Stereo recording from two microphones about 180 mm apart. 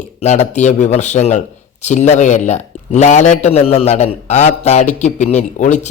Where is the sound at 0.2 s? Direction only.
40° left (ahead or behind).